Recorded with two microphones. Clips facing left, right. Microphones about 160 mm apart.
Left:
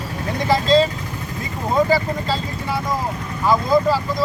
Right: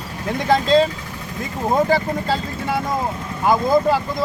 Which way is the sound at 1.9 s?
55° right (ahead or behind).